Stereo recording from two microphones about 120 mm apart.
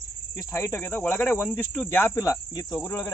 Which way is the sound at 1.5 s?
20° left (ahead or behind).